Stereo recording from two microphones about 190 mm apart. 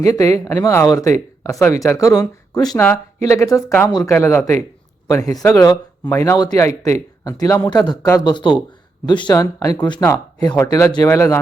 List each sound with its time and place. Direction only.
0.0 s speech: 15° left (ahead or behind)
10.0 s speech: 10° left (ahead or behind)